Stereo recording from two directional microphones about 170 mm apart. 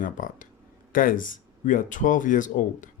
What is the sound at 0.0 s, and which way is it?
Speech, 50° left (ahead or behind).